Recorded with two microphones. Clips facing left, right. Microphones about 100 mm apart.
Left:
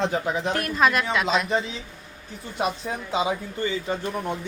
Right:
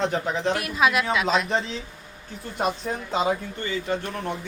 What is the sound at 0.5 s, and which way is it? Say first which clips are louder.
Speech: left 3 dB; 5° right (ahead or behind).